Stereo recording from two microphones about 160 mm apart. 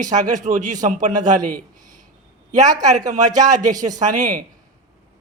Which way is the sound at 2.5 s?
25° right (ahead or behind).